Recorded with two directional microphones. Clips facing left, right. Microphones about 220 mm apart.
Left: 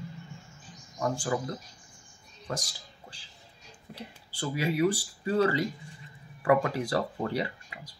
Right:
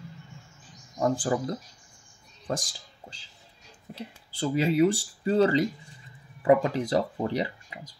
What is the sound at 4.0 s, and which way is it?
Speech, 25° right (ahead or behind).